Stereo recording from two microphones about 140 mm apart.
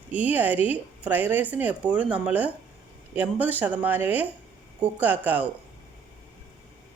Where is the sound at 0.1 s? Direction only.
10° right (ahead or behind).